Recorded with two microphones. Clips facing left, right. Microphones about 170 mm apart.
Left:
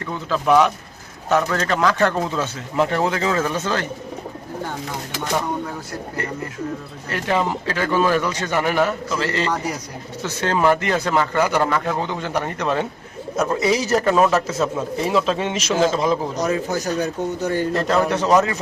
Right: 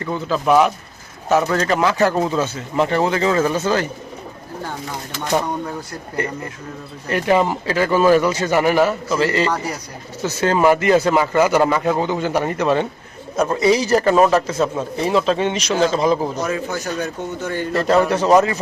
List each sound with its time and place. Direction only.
0.0 s speech: 5° right (ahead or behind)
6.2 s a man's voice: 15° right (ahead or behind); by 16.4 s centre (ahead or behind)
16.4 s speech: 40° left (ahead or behind)
17.7 s speech: centre (ahead or behind)